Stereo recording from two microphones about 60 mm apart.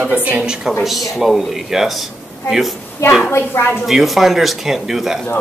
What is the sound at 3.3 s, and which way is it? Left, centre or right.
Speech, left.